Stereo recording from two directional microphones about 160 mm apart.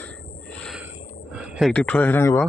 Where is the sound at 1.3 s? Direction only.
5° right (ahead or behind).